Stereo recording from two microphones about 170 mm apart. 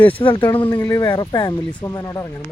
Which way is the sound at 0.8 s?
20° left (ahead or behind).